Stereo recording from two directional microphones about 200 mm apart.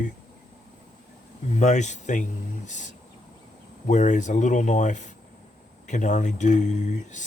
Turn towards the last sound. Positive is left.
turn(degrees=35)  # may be behind; listen again after turning